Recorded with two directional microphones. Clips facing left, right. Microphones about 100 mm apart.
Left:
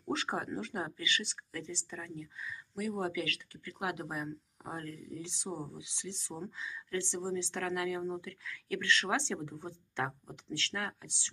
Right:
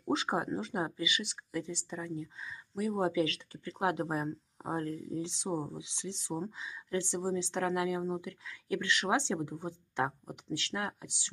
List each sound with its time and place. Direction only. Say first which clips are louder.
0.0 s speech: right 4 dB; 20° right (ahead or behind)